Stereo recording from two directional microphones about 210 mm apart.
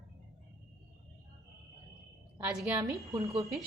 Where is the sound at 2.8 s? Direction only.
15° right (ahead or behind).